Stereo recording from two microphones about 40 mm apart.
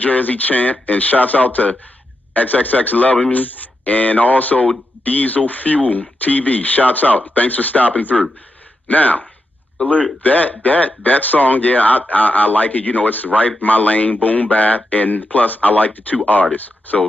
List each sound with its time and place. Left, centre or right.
0.0 s speech: left
10.2 s speech: left